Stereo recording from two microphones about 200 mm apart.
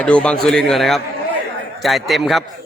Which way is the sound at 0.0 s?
5° left (ahead or behind).